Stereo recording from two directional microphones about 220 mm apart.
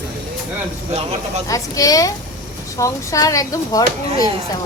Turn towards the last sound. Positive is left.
turn(degrees=15)  # may be behind; listen again after turning